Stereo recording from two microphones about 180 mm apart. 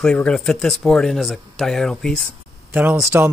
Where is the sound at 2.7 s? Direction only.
10° right (ahead or behind).